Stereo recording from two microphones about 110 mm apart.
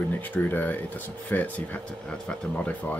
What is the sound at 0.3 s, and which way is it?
Speech, 15° left (ahead or behind).